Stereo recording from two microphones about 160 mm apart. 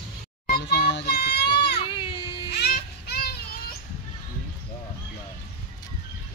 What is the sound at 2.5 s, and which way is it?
Child singing, 85° left.